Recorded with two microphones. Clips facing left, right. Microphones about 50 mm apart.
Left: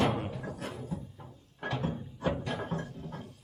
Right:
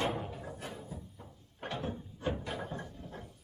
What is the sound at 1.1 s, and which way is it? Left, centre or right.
Music, centre.